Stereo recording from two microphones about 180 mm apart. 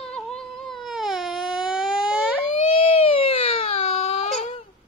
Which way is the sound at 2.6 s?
30° left (ahead or behind).